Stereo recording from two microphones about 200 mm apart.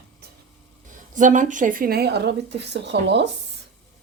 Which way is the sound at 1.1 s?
40° right (ahead or behind).